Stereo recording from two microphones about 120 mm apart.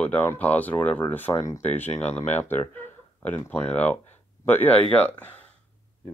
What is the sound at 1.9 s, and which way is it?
Speech, 65° left (ahead or behind).